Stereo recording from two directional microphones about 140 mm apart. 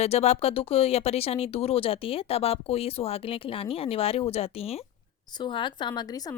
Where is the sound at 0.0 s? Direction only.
50° left (ahead or behind).